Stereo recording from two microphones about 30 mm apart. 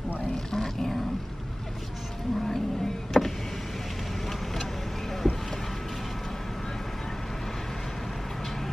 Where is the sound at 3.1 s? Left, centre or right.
Centre.